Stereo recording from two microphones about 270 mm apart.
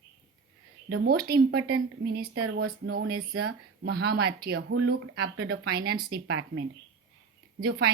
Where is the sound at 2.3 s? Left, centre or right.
Right.